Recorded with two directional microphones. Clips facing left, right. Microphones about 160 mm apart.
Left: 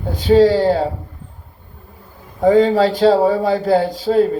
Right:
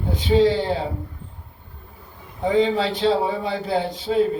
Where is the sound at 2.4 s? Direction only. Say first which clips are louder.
Left 7 dB; 45° left (ahead or behind).